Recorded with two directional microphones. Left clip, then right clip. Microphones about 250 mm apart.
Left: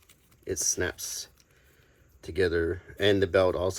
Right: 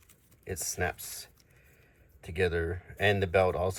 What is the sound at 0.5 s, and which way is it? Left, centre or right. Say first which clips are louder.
Speech: left 3 dB; centre.